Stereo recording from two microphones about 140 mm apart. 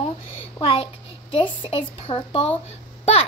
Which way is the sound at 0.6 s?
40° left (ahead or behind).